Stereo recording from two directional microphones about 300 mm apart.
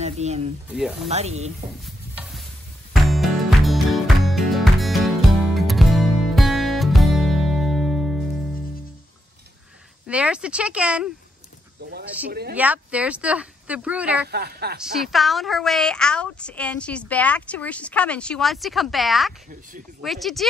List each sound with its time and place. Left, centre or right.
0.0 s speech: right
0.7 s a woman's voice: centre
1.0 s speech: right
2.9 s music: centre
10.0 s a woman's voice: centre
11.8 s a woman's voice: right
12.5 s a woman's voice: centre
14.2 s a woman's voice: right
14.8 s a woman's voice: centre